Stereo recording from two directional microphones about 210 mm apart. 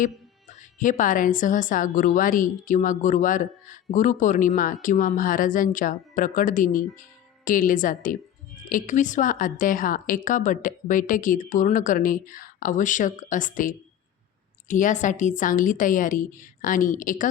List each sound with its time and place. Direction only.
0.8 s a woman's voice: 40° left (ahead or behind)